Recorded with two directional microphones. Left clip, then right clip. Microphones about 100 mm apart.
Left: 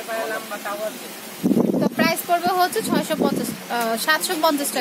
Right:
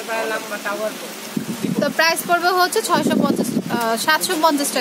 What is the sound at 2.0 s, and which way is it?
Speech, 30° right (ahead or behind).